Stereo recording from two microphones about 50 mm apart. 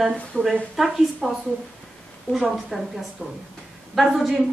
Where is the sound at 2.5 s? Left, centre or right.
Centre.